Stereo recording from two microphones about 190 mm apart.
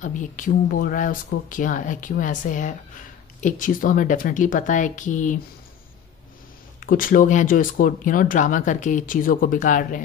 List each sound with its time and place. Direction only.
0.0 s speech: 40° left (ahead or behind)
6.8 s speech: 45° left (ahead or behind)